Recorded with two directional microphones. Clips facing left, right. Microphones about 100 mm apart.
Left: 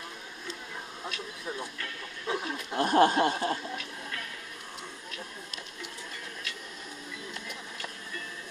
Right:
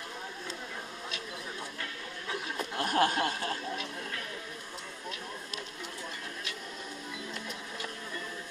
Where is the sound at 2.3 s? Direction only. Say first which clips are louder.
Left 6 dB; 20° left (ahead or behind).